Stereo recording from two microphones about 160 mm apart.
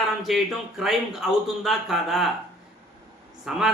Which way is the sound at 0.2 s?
Centre (ahead or behind).